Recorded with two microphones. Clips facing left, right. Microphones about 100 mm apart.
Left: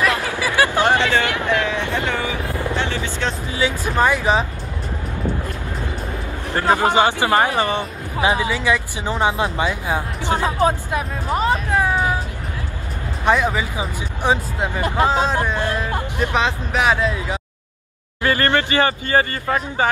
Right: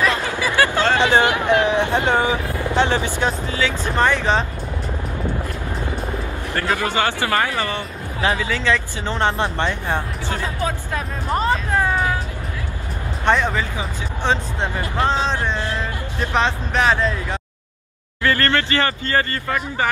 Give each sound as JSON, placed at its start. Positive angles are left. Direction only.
{"t": 0.0, "sound": "a sound", "side_deg": 15}
{"t": 0.9, "sound": "speech", "side_deg": -20}
{"t": 2.6, "sound": "vehicle", "side_deg": -20}
{"t": 3.4, "sound": "speech", "side_deg": 15}
{"t": 6.5, "sound": "speech", "side_deg": 20}
{"t": 11.2, "sound": "speech", "side_deg": 5}
{"t": 13.2, "sound": "speech", "side_deg": 5}